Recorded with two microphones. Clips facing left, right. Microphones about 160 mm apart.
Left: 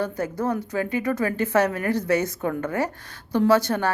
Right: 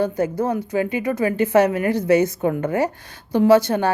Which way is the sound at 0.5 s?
15° right (ahead or behind).